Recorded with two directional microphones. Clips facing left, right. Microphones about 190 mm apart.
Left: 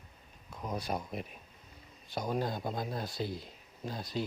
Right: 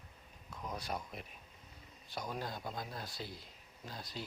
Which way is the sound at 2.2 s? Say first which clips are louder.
Left 9 dB; 30° left (ahead or behind).